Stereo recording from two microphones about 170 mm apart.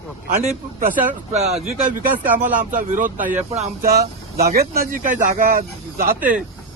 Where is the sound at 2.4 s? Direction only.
50° right (ahead or behind).